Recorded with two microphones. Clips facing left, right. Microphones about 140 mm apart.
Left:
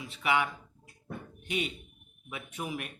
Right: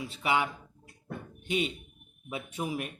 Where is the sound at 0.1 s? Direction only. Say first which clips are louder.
Left 1 dB; 30° right (ahead or behind).